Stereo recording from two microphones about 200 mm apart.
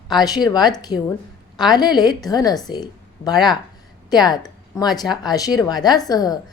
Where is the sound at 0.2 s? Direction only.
20° left (ahead or behind).